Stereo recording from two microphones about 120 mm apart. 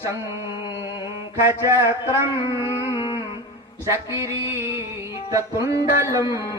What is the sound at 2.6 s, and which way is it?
Carnatic music, 25° left (ahead or behind).